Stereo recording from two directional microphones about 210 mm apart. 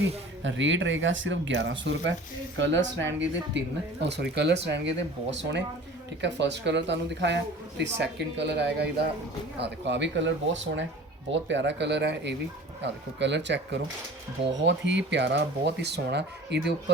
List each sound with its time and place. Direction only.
0.4 s speech: 60° right (ahead or behind)